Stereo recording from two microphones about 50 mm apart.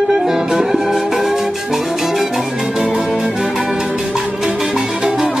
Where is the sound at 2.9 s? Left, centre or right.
Centre.